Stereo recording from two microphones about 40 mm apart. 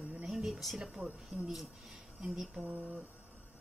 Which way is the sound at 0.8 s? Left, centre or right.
Centre.